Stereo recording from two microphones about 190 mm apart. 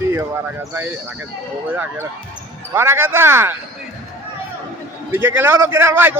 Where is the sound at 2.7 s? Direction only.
15° right (ahead or behind).